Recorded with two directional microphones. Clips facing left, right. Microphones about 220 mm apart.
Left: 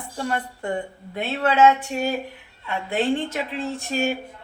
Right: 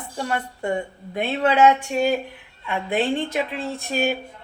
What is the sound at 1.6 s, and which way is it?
A woman's voice, 15° right (ahead or behind).